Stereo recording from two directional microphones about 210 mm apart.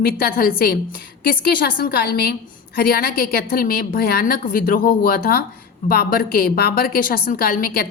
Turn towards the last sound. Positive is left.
turn(degrees=45)  # may be behind; listen again after turning